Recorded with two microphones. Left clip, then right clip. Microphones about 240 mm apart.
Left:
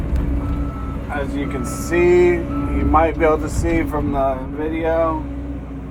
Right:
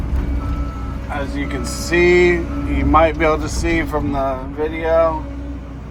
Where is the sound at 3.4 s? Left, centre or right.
Right.